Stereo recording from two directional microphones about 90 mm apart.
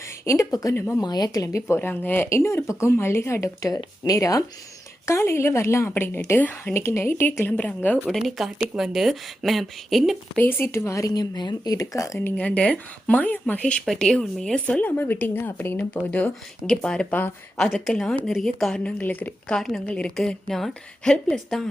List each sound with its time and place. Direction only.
0.3 s a woman's voice: 40° left (ahead or behind)
1.0 s speech: 50° left (ahead or behind)
1.6 s a woman's voice: 25° left (ahead or behind)
8.4 s a woman's voice: 10° right (ahead or behind)
10.3 s a woman's voice: 20° left (ahead or behind)
11.1 s speech: 50° left (ahead or behind)
12.2 s speech: 15° left (ahead or behind)
17.7 s a woman's voice: 5° left (ahead or behind)
18.8 s speech: 15° left (ahead or behind)
19.5 s a woman's voice: 5° left (ahead or behind)